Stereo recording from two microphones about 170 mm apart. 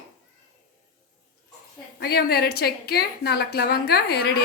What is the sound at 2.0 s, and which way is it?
A woman's voice, 65° left (ahead or behind).